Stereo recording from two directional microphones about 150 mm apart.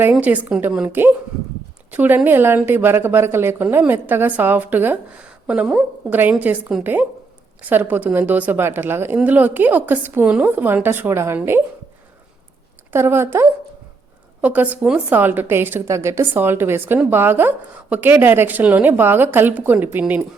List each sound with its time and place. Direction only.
0.1 s a woman's voice: 10° right (ahead or behind)
12.9 s a woman's voice: 15° right (ahead or behind)